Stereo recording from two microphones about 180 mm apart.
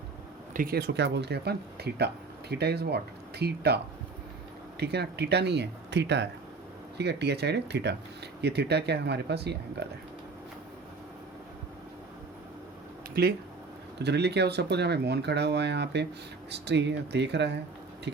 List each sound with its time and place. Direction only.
0.5 s speech: 55° right (ahead or behind)
4.8 s speech: 65° right (ahead or behind)
13.2 s speech: 55° right (ahead or behind)
14.0 s speech: 70° right (ahead or behind)